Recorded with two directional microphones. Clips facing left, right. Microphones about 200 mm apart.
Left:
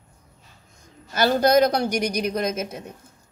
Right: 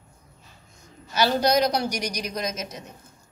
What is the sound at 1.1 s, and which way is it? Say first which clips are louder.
A man's voice: left 3 dB; 50° left (ahead or behind).